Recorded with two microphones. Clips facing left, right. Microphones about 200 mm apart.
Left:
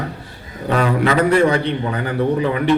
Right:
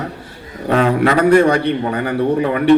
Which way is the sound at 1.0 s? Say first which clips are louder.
Right 3 dB; 50° right (ahead or behind).